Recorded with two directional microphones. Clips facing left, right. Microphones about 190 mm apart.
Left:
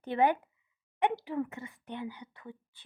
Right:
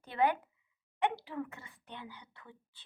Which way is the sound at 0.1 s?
20° left (ahead or behind).